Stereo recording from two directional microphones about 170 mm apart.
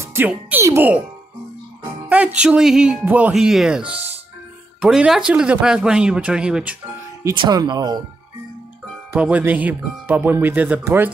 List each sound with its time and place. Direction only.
0.0 s speech: 15° right (ahead or behind)
2.0 s speech: 5° right (ahead or behind)
3.9 s music: 35° right (ahead or behind)
4.7 s speech: 5° right (ahead or behind)
7.3 s speech: 25° right (ahead or behind)
9.1 s speech: 10° right (ahead or behind)